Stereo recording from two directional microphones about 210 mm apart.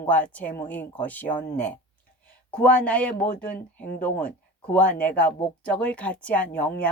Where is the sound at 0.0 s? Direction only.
5° left (ahead or behind).